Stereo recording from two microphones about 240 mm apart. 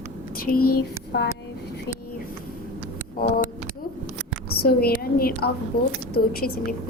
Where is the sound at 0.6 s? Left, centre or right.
Left.